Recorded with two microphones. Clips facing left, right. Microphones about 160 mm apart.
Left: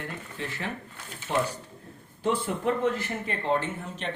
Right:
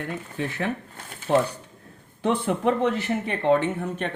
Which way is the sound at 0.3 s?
55° right (ahead or behind).